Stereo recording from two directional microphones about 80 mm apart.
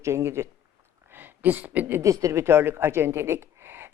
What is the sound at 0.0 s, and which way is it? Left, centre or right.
Speech, right.